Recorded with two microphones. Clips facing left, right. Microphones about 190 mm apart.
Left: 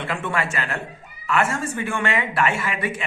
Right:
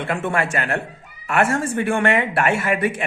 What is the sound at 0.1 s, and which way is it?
Speech, 50° right (ahead or behind).